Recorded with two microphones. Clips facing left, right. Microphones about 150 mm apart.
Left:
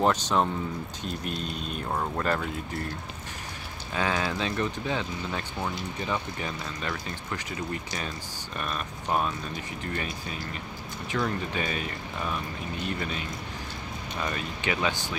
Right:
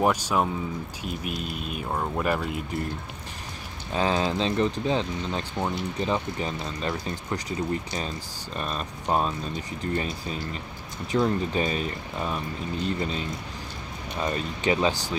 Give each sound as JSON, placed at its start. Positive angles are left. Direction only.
{"t": 0.0, "sound": "speech", "side_deg": -10}
{"t": 3.9, "sound": "speech", "side_deg": -30}
{"t": 14.2, "sound": "speech", "side_deg": -30}